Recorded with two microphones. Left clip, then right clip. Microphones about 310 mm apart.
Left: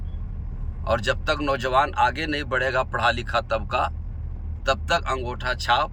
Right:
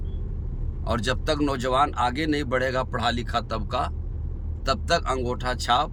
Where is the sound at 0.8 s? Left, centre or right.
Centre.